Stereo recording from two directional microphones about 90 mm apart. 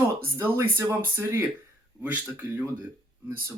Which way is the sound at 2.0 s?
15° right (ahead or behind).